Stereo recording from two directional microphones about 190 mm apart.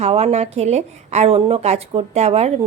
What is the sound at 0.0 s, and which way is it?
A woman's voice, 35° right (ahead or behind).